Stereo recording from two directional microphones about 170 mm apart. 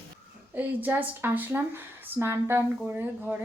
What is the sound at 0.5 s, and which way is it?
Speech, 10° right (ahead or behind).